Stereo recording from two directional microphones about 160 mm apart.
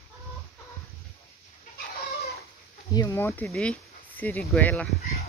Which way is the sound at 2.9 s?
20° left (ahead or behind).